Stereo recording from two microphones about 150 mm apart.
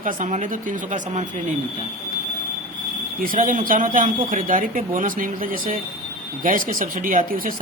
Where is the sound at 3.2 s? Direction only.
65° right (ahead or behind).